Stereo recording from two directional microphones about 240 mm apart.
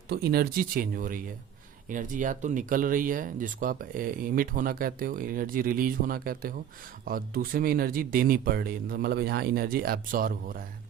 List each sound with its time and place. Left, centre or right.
0.1 s speech: right